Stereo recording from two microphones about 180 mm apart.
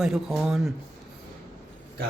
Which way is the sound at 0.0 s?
Centre (ahead or behind).